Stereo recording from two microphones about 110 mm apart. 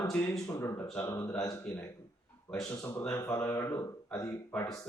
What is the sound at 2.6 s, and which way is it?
Speech, 25° left (ahead or behind).